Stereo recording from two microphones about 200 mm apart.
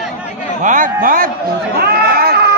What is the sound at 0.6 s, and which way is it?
Speech, 40° right (ahead or behind).